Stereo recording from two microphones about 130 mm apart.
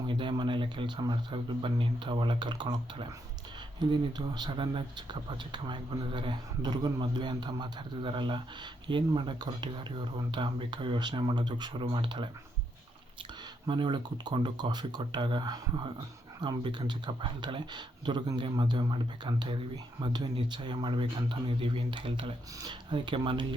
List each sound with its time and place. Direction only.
0.1 s speech: 40° right (ahead or behind)
13.7 s speech: 35° right (ahead or behind)